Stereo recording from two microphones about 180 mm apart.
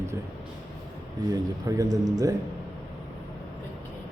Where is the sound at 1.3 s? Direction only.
20° right (ahead or behind).